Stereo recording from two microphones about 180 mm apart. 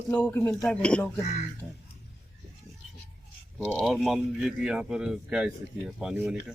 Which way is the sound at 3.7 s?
Centre (ahead or behind).